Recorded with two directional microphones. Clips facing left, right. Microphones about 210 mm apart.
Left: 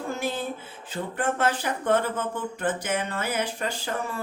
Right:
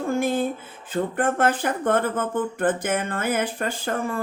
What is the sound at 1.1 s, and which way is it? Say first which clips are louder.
Speech: right 2 dB; 55° right (ahead or behind).